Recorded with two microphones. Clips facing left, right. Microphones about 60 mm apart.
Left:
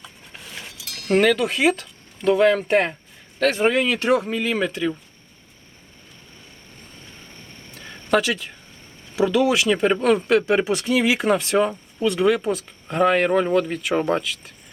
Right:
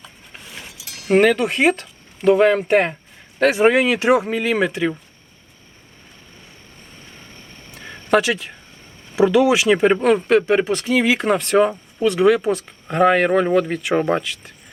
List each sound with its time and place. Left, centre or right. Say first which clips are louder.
0.0 s chink: even; centre
0.8 s speech: right 4 dB; centre
9.1 s speech: right 4 dB; centre
14.2 s speech: right 1 dB; centre